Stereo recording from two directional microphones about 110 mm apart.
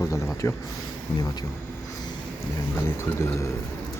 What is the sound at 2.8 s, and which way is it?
Speech, 20° left (ahead or behind).